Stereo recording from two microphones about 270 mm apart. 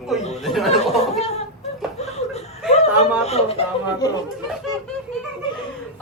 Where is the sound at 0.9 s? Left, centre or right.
Left.